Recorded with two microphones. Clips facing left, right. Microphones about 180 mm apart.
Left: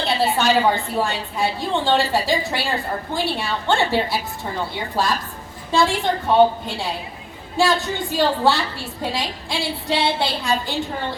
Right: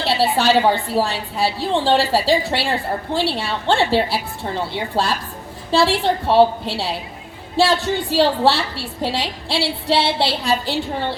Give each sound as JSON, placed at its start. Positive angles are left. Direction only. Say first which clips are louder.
{"t": 0.2, "sound": "a woman's voice", "louder": "right 2 dB", "side_deg": -30}